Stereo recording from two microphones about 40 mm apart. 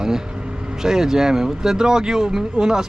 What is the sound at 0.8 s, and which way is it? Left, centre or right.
Speech, centre.